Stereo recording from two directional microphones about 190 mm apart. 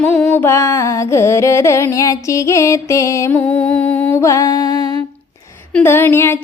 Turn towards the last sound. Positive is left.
turn(degrees=10)  # may be behind; listen again after turning